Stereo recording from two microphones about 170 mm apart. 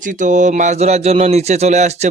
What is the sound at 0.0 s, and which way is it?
Speech, 50° right (ahead or behind).